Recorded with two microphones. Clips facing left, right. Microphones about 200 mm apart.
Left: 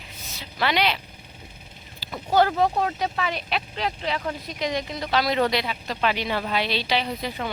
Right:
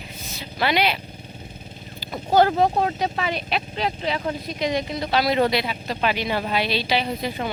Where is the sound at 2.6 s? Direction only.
25° right (ahead or behind); by 7.3 s 10° right (ahead or behind).